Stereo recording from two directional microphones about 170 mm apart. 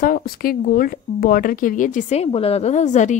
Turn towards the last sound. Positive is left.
turn(degrees=45)  # may be behind; listen again after turning